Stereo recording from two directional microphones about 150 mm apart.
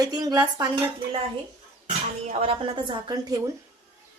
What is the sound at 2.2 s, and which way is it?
A woman's voice, 40° right (ahead or behind).